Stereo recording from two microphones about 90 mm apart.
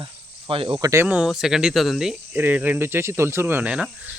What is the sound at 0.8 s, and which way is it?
Speech, 30° right (ahead or behind).